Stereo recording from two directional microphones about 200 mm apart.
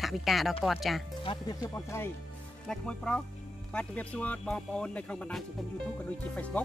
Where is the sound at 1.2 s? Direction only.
25° left (ahead or behind).